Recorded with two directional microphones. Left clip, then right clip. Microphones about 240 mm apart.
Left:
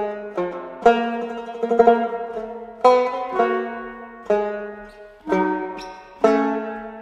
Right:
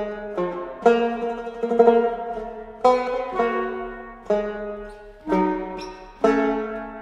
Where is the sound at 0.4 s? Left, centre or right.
Left.